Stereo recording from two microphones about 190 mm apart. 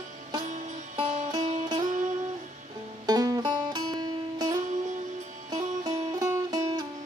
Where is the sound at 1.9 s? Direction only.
40° right (ahead or behind).